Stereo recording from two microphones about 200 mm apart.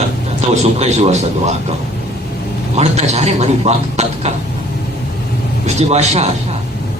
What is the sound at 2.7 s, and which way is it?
Speech, 35° right (ahead or behind).